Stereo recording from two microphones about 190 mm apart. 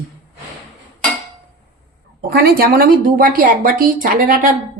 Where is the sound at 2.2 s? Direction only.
55° right (ahead or behind).